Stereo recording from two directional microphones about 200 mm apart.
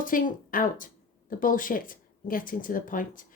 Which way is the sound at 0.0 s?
45° left (ahead or behind).